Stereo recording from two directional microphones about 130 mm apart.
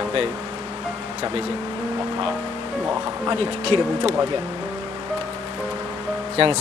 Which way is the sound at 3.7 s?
45° right (ahead or behind).